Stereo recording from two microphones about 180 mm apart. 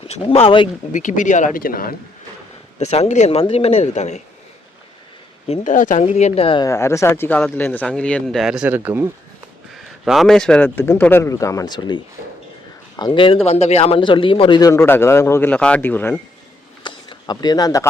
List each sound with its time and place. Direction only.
0.1 s speech: 35° left (ahead or behind)
0.9 s speech: 45° left (ahead or behind)
2.7 s speech: 35° left (ahead or behind)
5.6 s speech: 45° left (ahead or behind)
6.7 s a man's voice: 15° left (ahead or behind)
14.7 s a man's voice: 15° left (ahead or behind)
16.8 s a sound: 25° left (ahead or behind)